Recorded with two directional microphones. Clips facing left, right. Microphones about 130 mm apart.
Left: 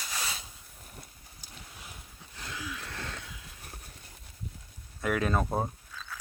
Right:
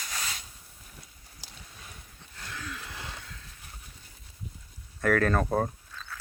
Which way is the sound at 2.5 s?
10° left (ahead or behind).